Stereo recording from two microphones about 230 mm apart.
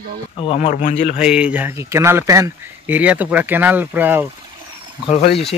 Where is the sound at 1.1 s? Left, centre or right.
Centre.